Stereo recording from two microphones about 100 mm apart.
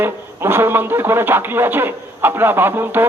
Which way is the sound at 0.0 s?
20° right (ahead or behind).